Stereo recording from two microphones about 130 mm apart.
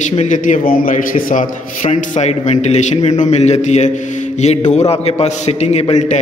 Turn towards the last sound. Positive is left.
turn(degrees=60)  # may be behind; listen again after turning